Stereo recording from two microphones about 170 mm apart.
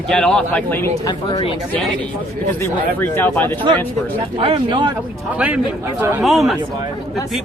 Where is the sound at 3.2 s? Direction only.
10° left (ahead or behind).